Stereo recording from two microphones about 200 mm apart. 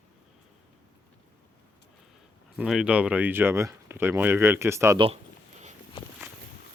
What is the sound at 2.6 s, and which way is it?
Speech, 5° right (ahead or behind).